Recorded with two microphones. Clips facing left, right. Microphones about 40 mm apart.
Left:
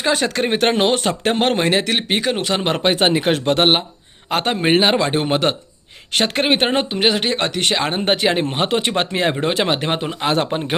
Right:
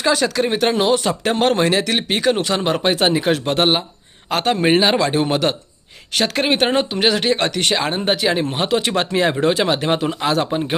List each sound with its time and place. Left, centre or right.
0.0 s speech: left
2.6 s a man's voice: left
4.3 s a man's voice: left
7.9 s a man's voice: left
9.0 s speech: left
10.3 s a man's voice: left